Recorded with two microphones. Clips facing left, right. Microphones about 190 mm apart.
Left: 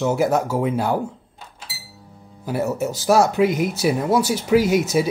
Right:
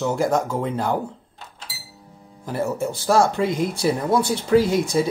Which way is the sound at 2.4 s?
5° left (ahead or behind).